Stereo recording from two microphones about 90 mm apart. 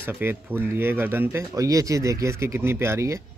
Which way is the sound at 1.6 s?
40° right (ahead or behind).